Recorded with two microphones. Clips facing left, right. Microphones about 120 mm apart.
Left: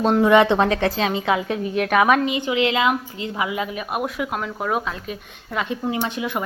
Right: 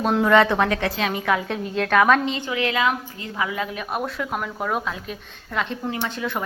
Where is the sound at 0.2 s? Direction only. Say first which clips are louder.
Left 2 dB; 15° left (ahead or behind).